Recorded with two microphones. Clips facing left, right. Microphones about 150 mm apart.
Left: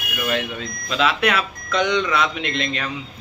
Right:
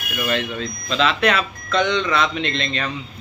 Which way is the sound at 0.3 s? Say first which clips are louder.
Right 1 dB; 10° left (ahead or behind).